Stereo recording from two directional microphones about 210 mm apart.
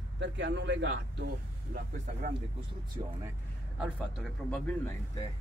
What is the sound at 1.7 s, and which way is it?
Speech, 40° right (ahead or behind).